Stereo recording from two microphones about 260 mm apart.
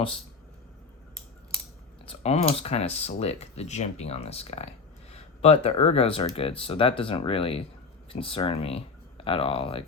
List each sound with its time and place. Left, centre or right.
2.0 s speech: left